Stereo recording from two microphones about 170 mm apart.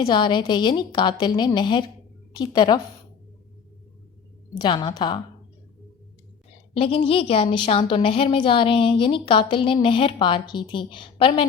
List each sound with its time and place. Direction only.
0.1 s a woman's voice: 25° left (ahead or behind)
4.6 s a woman's voice: 25° left (ahead or behind)
6.7 s a woman's voice: 35° left (ahead or behind)